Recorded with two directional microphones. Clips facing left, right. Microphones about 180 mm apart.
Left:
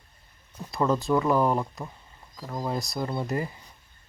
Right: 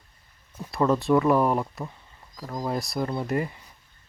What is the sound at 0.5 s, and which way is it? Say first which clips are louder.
Speech: right 2 dB; 5° right (ahead or behind).